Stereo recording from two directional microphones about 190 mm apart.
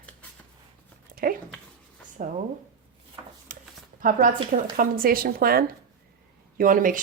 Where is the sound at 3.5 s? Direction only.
45° right (ahead or behind).